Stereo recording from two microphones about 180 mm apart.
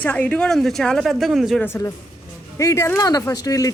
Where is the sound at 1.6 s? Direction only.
15° left (ahead or behind).